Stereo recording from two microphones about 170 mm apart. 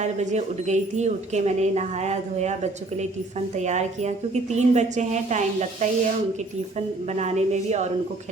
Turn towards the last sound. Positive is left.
turn(degrees=-40)  # may be behind; listen again after turning